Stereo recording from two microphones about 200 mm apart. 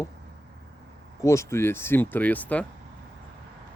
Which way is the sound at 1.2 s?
15° left (ahead or behind).